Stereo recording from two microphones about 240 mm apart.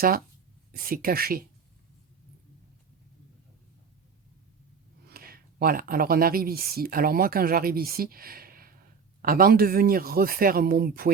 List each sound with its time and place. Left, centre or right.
0.8 s speech: right
5.0 s speech: right